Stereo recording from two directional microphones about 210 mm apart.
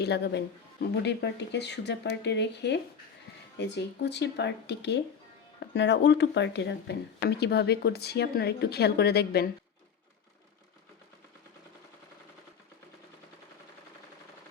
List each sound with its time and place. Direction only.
0.0 s speech: 55° left (ahead or behind)